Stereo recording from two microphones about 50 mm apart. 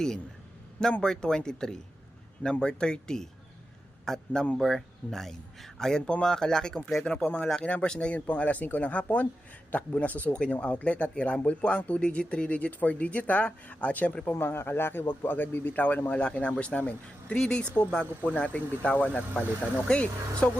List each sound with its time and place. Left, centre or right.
1.0 s speech: centre; by 10.3 s left
10.3 s speech: left
14.3 s a man's voice: left
17.3 s speech: centre
18.3 s speech: left